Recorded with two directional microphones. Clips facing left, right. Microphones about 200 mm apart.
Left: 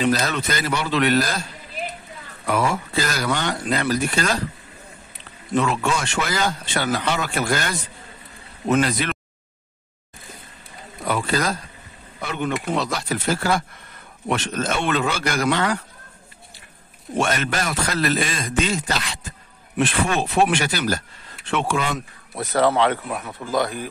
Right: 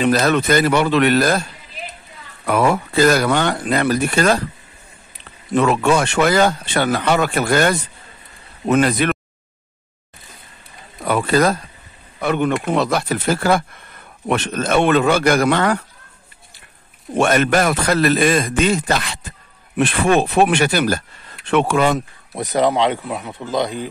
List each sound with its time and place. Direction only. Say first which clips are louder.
0.0 s speech: right 5 dB; 60° right (ahead or behind)
2.4 s speech: right 5 dB; 60° right (ahead or behind)
5.5 s speech: right 6 dB; 60° right (ahead or behind)
11.1 s speech: right 7 dB; 55° right (ahead or behind)
17.1 s speech: right 7 dB; 55° right (ahead or behind)
22.3 s speech: right 2 dB; 15° right (ahead or behind)